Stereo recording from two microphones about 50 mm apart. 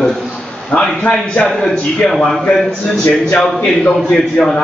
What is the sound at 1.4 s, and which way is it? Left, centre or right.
A man's voice, centre.